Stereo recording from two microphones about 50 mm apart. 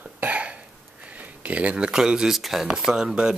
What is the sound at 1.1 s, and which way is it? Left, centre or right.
Speech, right.